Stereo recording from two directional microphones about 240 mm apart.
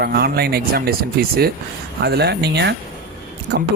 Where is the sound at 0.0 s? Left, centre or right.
Right.